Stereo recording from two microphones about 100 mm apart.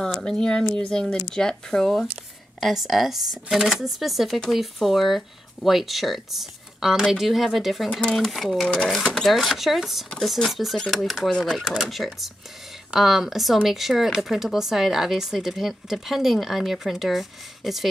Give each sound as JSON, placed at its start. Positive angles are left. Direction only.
{"t": 0.0, "sound": "speech", "side_deg": 5}